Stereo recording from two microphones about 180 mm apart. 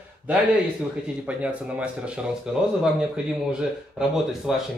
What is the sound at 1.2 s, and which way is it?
A man's voice, 5° right (ahead or behind).